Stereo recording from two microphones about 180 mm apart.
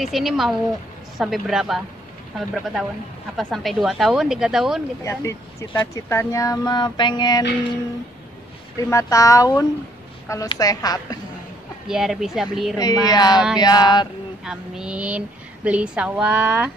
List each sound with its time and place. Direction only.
0.0 s a woman's voice: centre (ahead or behind)
5.0 s speech: 15° left (ahead or behind)
8.7 s a woman's voice: 20° left (ahead or behind)
11.9 s a woman's voice: 5° right (ahead or behind)
12.7 s speech: 20° left (ahead or behind)
14.4 s a woman's voice: 5° right (ahead or behind)